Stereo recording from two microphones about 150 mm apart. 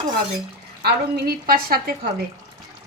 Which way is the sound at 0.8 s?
90° right.